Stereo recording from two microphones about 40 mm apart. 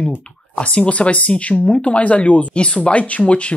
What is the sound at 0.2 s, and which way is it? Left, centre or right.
A woman's voice, left.